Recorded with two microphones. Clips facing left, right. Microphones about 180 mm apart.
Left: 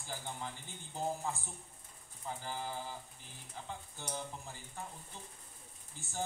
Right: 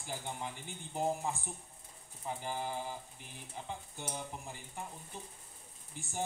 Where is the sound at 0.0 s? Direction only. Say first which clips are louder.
Right 2 dB; 15° right (ahead or behind).